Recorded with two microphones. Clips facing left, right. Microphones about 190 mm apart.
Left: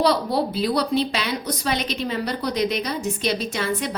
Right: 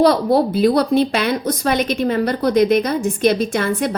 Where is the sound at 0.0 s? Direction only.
50° right (ahead or behind).